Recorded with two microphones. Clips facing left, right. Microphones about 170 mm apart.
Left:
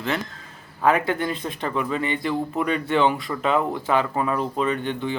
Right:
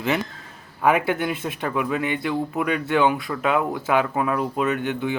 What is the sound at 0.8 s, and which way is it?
Speech, 10° right (ahead or behind).